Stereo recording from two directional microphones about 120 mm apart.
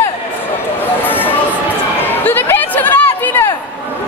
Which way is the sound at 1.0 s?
15° left (ahead or behind).